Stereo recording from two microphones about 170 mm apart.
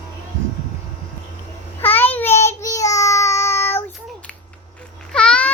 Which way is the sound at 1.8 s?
10° left (ahead or behind).